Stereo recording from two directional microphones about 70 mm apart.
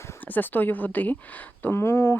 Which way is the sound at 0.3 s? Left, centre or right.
Left.